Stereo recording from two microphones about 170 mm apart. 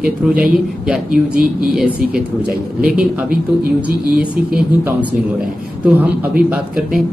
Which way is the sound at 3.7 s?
5° right (ahead or behind).